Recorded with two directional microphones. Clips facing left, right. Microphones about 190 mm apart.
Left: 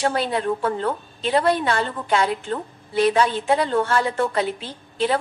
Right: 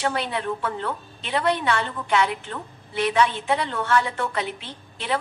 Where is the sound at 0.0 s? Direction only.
40° left (ahead or behind).